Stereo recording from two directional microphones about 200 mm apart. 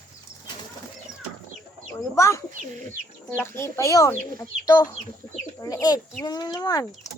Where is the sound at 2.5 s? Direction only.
40° right (ahead or behind).